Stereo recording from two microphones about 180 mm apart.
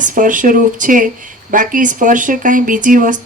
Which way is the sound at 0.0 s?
45° right (ahead or behind).